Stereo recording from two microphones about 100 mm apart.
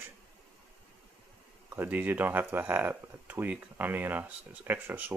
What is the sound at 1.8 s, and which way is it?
Speech, 20° right (ahead or behind).